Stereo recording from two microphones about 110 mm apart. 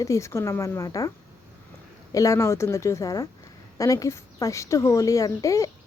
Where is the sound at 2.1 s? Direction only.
30° left (ahead or behind).